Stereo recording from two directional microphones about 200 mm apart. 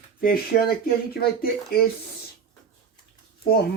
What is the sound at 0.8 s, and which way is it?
Speech, 50° left (ahead or behind).